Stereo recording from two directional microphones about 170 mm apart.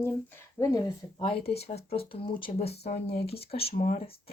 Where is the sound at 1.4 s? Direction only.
70° left (ahead or behind).